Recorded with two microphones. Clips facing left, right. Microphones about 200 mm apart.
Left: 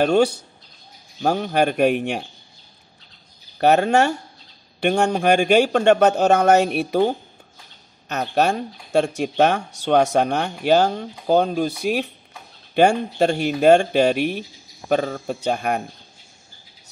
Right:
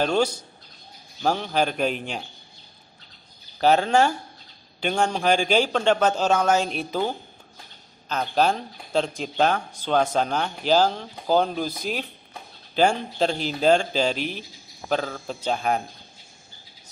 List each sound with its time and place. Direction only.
1.2 s a man's voice: 60° left (ahead or behind)
3.5 s a man's voice: 65° left (ahead or behind)
11.6 s a man's voice: 75° left (ahead or behind)